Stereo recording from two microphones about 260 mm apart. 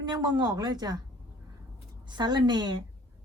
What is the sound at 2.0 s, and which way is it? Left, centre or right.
Speech, centre.